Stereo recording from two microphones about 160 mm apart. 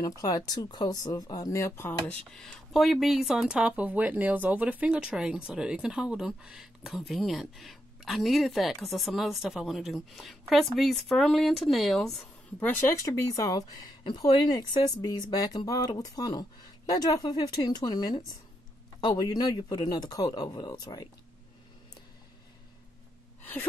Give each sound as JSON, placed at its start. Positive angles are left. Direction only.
{"t": 0.5, "sound": "speech", "side_deg": 25}
{"t": 2.3, "sound": "speech", "side_deg": 5}
{"t": 12.6, "sound": "speech", "side_deg": 15}
{"t": 23.4, "sound": "gasp", "side_deg": 10}